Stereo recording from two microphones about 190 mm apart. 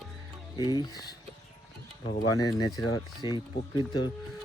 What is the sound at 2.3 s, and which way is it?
Speech, 20° left (ahead or behind).